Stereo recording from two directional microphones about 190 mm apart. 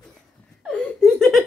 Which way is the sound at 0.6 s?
Centre (ahead or behind).